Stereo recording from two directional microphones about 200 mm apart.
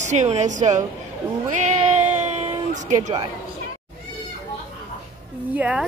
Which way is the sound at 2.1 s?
35° right (ahead or behind).